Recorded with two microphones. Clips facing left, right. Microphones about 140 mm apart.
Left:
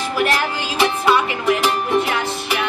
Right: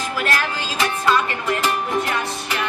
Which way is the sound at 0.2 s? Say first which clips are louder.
Left 4 dB; 15° left (ahead or behind).